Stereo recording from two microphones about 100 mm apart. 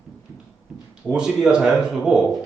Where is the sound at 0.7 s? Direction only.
5° right (ahead or behind).